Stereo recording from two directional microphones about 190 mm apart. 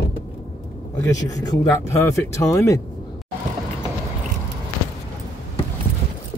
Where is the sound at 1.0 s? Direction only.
20° left (ahead or behind).